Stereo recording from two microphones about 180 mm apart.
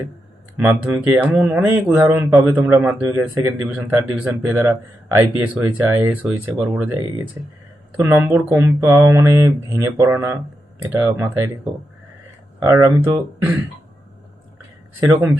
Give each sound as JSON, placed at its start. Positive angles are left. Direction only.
{"t": 0.6, "sound": "a man's voice", "side_deg": -10}
{"t": 15.0, "sound": "a man's voice", "side_deg": -10}